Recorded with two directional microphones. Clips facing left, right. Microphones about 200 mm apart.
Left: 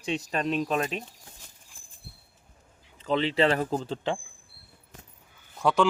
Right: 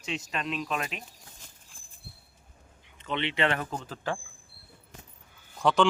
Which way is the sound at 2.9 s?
35° left (ahead or behind).